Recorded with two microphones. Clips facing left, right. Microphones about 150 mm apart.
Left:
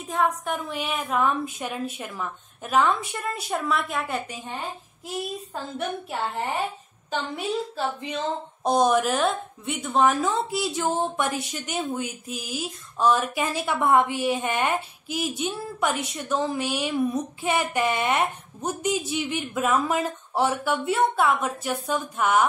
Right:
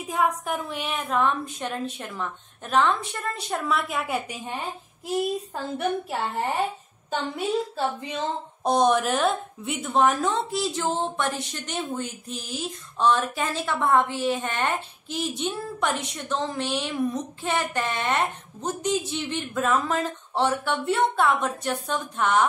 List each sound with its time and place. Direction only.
0.1 s a woman's voice: 5° right (ahead or behind)
5.8 s a woman's voice: centre (ahead or behind)
8.6 s a woman's voice: centre (ahead or behind)